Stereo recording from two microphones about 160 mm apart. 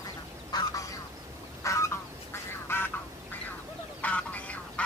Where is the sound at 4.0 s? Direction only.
10° left (ahead or behind).